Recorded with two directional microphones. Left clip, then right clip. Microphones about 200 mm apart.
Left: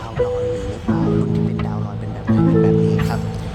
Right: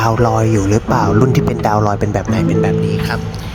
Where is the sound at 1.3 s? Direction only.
45° right (ahead or behind).